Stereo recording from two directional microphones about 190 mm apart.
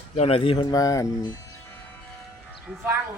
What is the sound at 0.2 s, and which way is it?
Speech, 30° left (ahead or behind).